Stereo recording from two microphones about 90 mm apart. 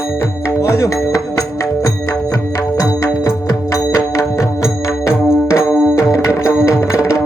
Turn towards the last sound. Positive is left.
turn(degrees=35)  # may be behind; listen again after turning